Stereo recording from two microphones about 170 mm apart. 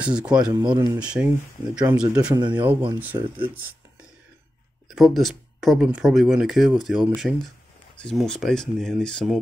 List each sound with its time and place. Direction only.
0.0 s speech: 5° right (ahead or behind)
0.5 s speech: 20° right (ahead or behind)
0.9 s speech: 5° right (ahead or behind)
4.8 s speech: centre (ahead or behind)